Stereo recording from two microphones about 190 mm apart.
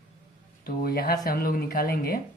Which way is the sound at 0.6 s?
55° left (ahead or behind).